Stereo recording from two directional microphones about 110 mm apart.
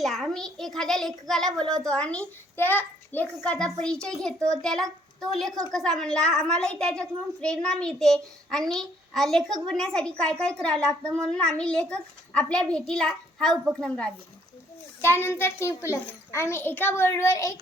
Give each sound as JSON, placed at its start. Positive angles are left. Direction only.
{"t": 0.0, "sound": "a child's voice", "side_deg": 0}
{"t": 15.0, "sound": "a child's voice", "side_deg": 20}